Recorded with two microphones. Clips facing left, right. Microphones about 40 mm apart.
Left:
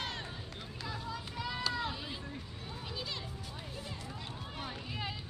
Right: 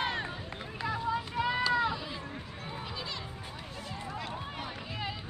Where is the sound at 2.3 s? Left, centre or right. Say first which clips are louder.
Right 4 dB; right.